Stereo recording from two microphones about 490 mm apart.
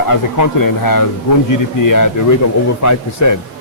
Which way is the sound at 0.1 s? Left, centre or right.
Left.